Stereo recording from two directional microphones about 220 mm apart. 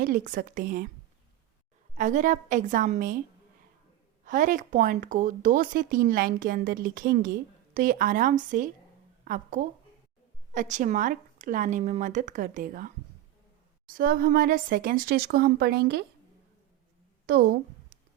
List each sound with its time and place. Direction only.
0.0 s speech: 40° right (ahead or behind)
2.0 s speech: 35° right (ahead or behind)
4.3 s speech: 35° right (ahead or behind)
13.9 s speech: 40° right (ahead or behind)
17.3 s a woman's voice: 45° right (ahead or behind)